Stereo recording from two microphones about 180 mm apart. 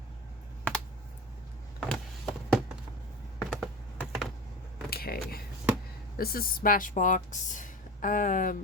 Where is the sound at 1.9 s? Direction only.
Centre (ahead or behind).